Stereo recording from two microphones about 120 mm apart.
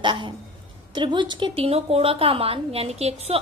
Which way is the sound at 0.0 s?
40° right (ahead or behind).